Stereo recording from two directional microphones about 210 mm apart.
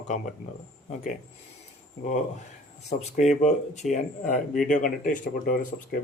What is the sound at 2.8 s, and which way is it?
Speech, 35° left (ahead or behind).